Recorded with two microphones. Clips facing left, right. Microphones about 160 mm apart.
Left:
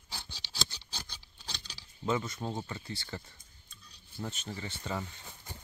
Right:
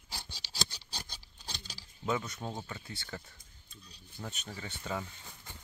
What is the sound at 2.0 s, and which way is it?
Speech, centre (ahead or behind).